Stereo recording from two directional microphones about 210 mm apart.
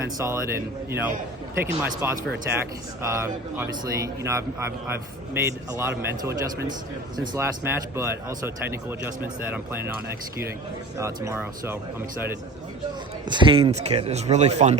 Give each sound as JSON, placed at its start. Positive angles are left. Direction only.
{"t": 0.2, "sound": "speech", "side_deg": -10}
{"t": 10.9, "sound": "speech", "side_deg": -15}
{"t": 13.2, "sound": "speech", "side_deg": -20}